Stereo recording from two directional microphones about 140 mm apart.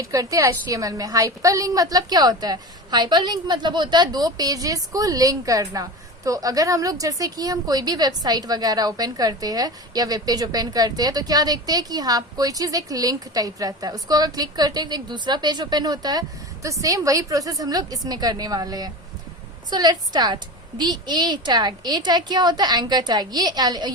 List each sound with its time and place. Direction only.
0.0 s a woman's voice: 25° right (ahead or behind)